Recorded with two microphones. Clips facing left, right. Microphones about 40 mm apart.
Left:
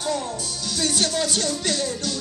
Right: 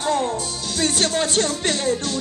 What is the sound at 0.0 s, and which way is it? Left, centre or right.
Music, right.